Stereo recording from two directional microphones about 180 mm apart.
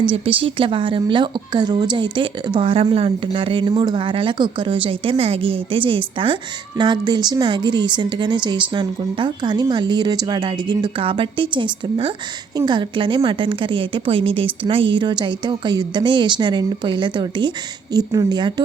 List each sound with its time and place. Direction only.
0.0 s a woman's voice: 30° right (ahead or behind)